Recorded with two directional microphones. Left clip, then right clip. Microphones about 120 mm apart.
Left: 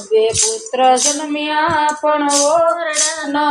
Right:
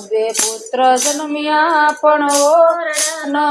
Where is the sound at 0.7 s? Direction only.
25° right (ahead or behind).